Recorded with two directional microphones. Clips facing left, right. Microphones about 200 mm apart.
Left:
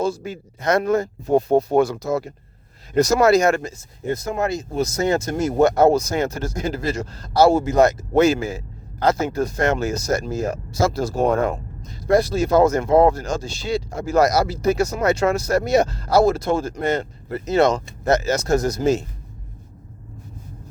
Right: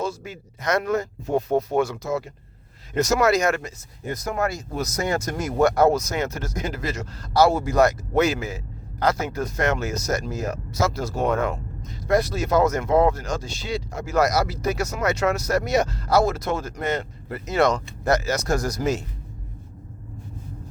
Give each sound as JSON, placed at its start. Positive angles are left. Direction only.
{"t": 0.0, "sound": "speech", "side_deg": 30}